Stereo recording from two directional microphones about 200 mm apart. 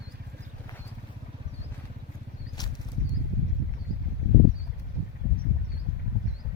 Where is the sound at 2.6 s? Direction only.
20° left (ahead or behind).